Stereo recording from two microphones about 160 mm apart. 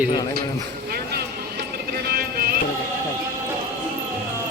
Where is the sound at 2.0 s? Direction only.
75° right (ahead or behind).